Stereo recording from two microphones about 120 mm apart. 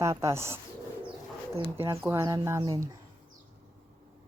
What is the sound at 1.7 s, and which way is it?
Speech, 20° right (ahead or behind).